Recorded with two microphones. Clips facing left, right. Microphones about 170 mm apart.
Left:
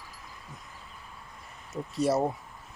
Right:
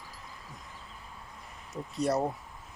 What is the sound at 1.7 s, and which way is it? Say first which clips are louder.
Speech: left 3 dB; 5° left (ahead or behind).